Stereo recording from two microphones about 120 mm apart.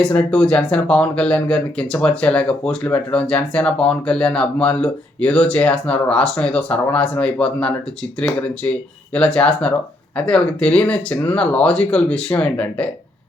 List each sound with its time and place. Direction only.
0.0 s speech: 10° left (ahead or behind)